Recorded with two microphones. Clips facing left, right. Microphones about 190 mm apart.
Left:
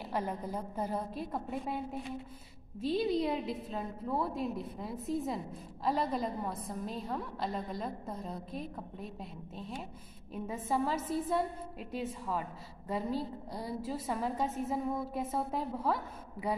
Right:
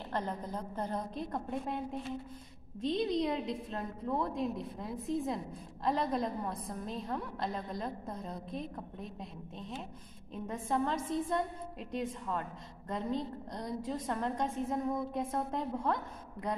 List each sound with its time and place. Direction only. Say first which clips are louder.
0.1 s a woman's voice: left 1 dB; 10° left (ahead or behind)